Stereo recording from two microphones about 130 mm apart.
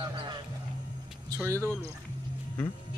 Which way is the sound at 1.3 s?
25° right (ahead or behind).